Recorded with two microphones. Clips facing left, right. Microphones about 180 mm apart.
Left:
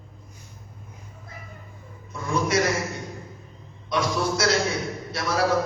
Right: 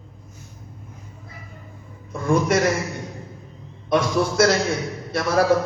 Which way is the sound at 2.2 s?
55° right (ahead or behind).